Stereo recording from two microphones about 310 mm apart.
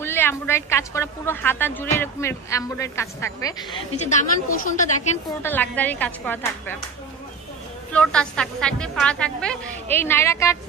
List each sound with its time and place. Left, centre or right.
0.0 s a woman's voice: centre
4.1 s a woman's voice: left
5.4 s a woman's voice: centre
7.9 s a woman's voice: centre